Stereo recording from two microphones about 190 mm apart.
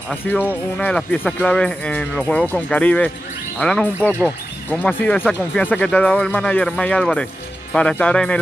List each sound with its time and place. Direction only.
0.1 s speech: 10° left (ahead or behind)